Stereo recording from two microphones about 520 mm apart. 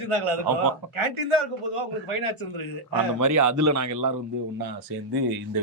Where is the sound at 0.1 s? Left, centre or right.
Right.